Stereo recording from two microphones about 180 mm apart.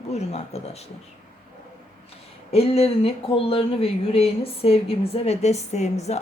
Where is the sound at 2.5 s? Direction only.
35° left (ahead or behind).